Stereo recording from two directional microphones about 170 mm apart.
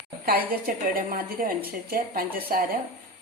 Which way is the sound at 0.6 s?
55° right (ahead or behind).